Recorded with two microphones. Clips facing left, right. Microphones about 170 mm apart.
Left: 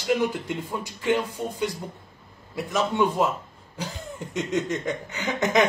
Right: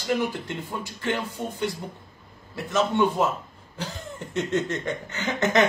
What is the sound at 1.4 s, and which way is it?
Speech, 20° right (ahead or behind).